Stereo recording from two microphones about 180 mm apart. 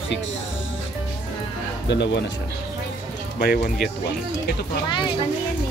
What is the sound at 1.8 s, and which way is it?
Speech, 75° left (ahead or behind).